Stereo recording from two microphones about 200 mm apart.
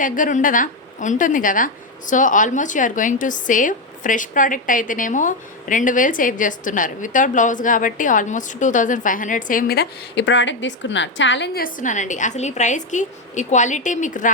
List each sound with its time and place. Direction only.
0.0 s a woman's voice: 40° left (ahead or behind)